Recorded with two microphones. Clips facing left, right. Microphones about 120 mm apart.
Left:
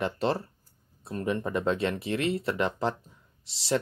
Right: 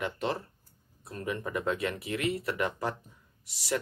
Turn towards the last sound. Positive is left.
turn(degrees=25)  # may be behind; listen again after turning